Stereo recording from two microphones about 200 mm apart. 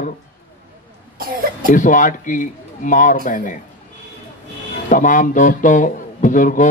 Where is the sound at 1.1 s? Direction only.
45° right (ahead or behind).